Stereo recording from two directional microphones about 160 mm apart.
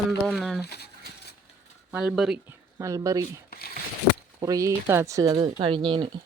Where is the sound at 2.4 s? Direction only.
20° right (ahead or behind).